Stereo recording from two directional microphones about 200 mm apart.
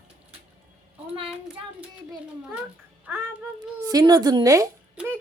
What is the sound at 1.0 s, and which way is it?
Speech, 30° right (ahead or behind).